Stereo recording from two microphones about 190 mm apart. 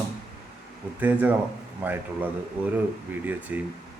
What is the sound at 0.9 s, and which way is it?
Speech, 10° right (ahead or behind).